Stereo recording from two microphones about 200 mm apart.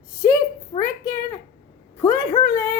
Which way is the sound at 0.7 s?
15° left (ahead or behind).